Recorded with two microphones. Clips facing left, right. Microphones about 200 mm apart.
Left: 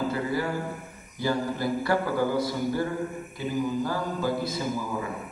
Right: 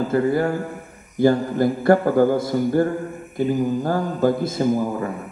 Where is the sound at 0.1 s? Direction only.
50° right (ahead or behind).